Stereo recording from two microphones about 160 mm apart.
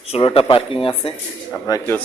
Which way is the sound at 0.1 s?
35° left (ahead or behind).